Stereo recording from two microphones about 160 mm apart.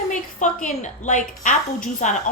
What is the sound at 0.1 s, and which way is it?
A woman's voice, 50° left (ahead or behind).